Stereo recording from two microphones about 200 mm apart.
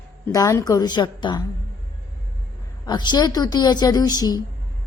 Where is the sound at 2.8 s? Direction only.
20° left (ahead or behind).